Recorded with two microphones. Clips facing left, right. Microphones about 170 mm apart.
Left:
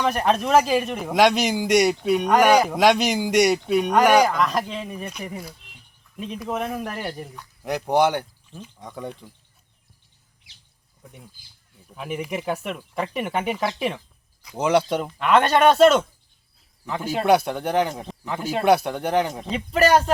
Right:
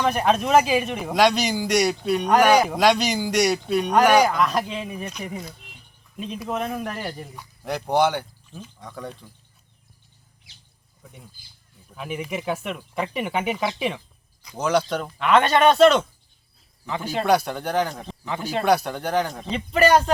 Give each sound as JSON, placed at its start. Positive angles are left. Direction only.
{"t": 0.0, "sound": "speech", "side_deg": 0}
{"t": 1.1, "sound": "speech", "side_deg": 20}
{"t": 2.5, "sound": "speech", "side_deg": 0}
{"t": 2.7, "sound": "speech", "side_deg": 20}
{"t": 4.2, "sound": "speech", "side_deg": 0}
{"t": 11.9, "sound": "speech", "side_deg": 5}
{"t": 14.7, "sound": "speech", "side_deg": 25}
{"t": 15.2, "sound": "speech", "side_deg": 5}
{"t": 17.5, "sound": "speech", "side_deg": 15}
{"t": 17.8, "sound": "speech", "side_deg": 5}
{"t": 18.8, "sound": "speech", "side_deg": 15}
{"t": 19.3, "sound": "speech", "side_deg": 5}